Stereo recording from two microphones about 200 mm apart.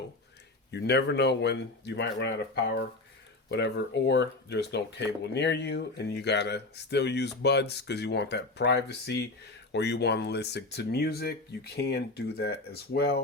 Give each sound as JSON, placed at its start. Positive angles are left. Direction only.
{"t": 0.7, "sound": "speech", "side_deg": 60}